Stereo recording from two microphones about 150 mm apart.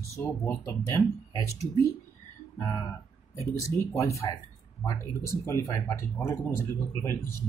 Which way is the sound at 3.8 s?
20° left (ahead or behind).